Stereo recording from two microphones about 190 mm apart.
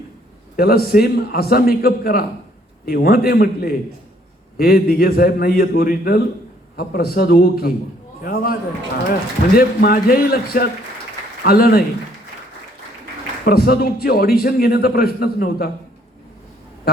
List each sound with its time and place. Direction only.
0.5 s a man's voice: 55° left (ahead or behind)
9.6 s a man's voice: 50° left (ahead or behind)
13.4 s a man's voice: 55° left (ahead or behind)